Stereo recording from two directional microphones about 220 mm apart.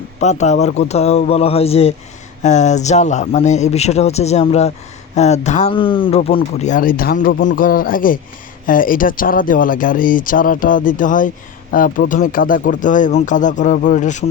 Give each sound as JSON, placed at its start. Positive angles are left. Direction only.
{"t": 0.2, "sound": "a man's voice", "side_deg": 30}